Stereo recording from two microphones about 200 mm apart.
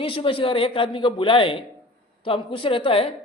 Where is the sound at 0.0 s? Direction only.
25° left (ahead or behind).